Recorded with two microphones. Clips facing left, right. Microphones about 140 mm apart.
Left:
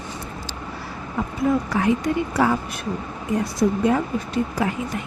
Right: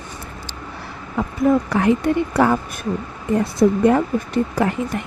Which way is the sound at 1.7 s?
60° right (ahead or behind).